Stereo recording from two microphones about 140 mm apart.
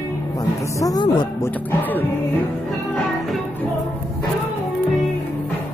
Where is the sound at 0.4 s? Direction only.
25° left (ahead or behind).